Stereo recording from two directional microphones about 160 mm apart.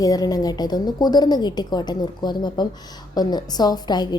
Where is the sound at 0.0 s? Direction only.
25° left (ahead or behind).